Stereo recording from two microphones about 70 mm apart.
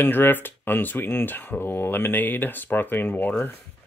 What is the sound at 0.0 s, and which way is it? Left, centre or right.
Speech, left.